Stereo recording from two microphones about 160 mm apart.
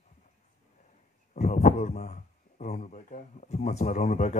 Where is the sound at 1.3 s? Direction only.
50° left (ahead or behind).